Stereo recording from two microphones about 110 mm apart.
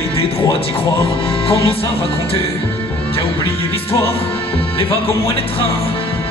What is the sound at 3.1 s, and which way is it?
Speech, 60° left (ahead or behind).